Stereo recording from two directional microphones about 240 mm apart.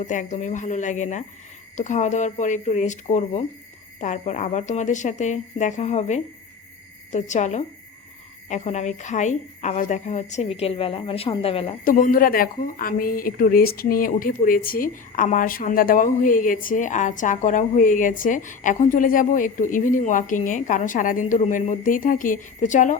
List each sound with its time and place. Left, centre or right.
0.0 s a woman's voice: left